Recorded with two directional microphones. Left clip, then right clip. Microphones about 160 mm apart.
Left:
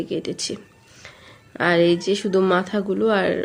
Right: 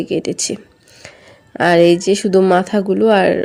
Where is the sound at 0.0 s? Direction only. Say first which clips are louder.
Right 7 dB; 45° right (ahead or behind).